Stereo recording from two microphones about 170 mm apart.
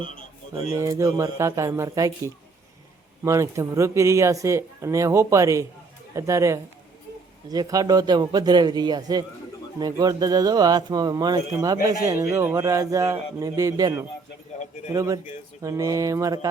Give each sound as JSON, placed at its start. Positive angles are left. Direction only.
{"t": 0.8, "sound": "a man's voice", "side_deg": -20}